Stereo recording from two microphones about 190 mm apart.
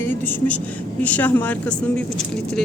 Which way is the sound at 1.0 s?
10° left (ahead or behind).